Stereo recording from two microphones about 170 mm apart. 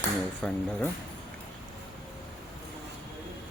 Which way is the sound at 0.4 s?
5° left (ahead or behind).